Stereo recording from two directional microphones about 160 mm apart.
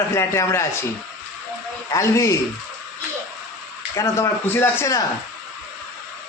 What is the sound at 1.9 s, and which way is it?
Speech, 20° left (ahead or behind).